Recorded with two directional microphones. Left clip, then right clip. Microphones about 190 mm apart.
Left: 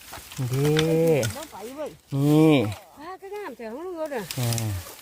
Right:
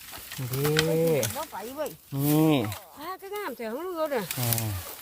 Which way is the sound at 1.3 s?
60° right (ahead or behind).